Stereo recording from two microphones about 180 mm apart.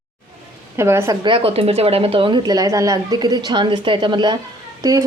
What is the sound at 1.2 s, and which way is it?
Speech, 30° right (ahead or behind).